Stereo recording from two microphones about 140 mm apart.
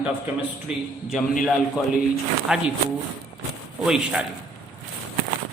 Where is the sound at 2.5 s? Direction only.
5° right (ahead or behind).